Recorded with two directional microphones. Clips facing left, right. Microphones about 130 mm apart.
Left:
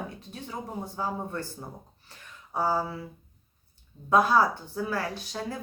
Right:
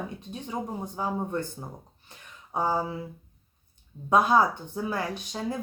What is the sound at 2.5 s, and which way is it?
Speech, 20° right (ahead or behind).